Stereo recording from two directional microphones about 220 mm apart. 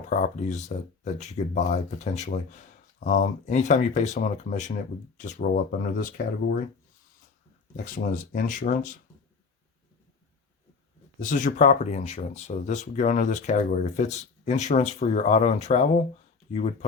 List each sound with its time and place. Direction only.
0.1 s speech: 35° left (ahead or behind)
7.9 s speech: 35° left (ahead or behind)
11.2 s speech: 35° left (ahead or behind)